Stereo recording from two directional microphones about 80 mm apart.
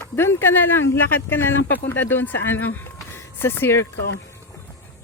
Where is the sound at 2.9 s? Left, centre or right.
Left.